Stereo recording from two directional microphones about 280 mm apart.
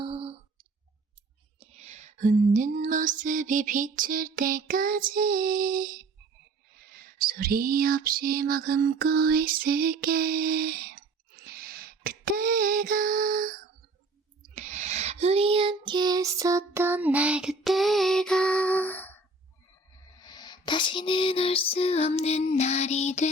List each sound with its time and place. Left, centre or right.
0.0 s clicking: centre
1.5 s music: right
6.9 s a sound: right
14.5 s music: right; by 19.1 s centre
20.1 s music: centre